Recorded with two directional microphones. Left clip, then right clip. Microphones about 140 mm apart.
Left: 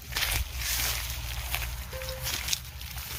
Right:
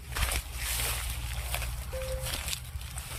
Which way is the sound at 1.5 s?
90° right.